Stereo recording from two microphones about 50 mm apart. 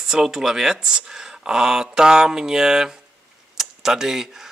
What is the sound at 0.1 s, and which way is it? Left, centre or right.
Speech, centre.